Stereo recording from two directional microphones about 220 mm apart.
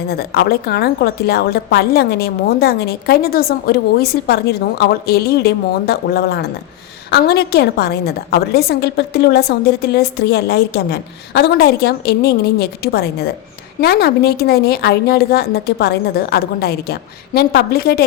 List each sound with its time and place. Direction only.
0.1 s a woman's voice: 45° left (ahead or behind)